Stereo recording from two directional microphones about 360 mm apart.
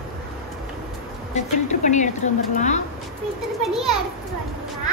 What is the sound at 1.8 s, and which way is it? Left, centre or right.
A woman's voice, centre.